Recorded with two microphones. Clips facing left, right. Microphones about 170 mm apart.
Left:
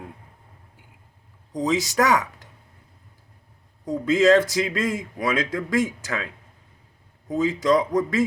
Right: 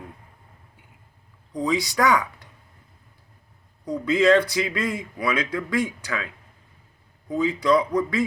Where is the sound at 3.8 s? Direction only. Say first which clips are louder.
Left 1 dB; 45° left (ahead or behind).